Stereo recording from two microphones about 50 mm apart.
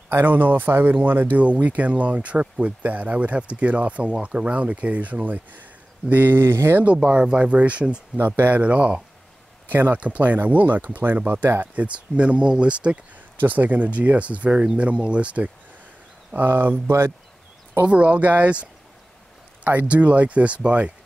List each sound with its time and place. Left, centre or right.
0.1 s speech: right
6.3 s speech: right
6.8 s speech: right
8.4 s speech: right
8.6 s speech: right
9.7 s speech: right
13.4 s speech: right
16.3 s speech: right
17.8 s speech: right